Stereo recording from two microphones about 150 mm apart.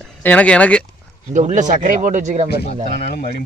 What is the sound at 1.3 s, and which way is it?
Speech, 55° right (ahead or behind).